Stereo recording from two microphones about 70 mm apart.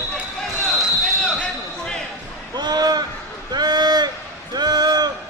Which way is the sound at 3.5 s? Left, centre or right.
Right.